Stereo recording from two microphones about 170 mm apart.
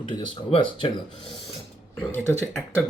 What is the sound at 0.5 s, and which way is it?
Speech, 30° left (ahead or behind).